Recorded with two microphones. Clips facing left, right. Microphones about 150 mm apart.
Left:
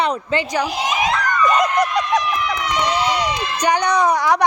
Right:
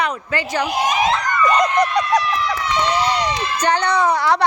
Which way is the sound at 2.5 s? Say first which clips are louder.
Right 1 dB; 15° left (ahead or behind).